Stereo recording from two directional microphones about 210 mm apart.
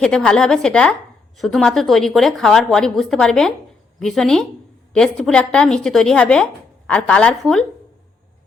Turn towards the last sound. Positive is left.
turn(degrees=5)  # may be behind; listen again after turning